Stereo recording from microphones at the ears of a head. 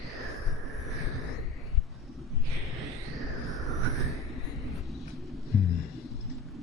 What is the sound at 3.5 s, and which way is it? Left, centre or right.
Vehicle, right.